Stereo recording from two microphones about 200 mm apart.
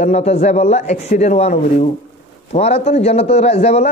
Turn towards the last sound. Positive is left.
turn(degrees=30)  # may be behind; listen again after turning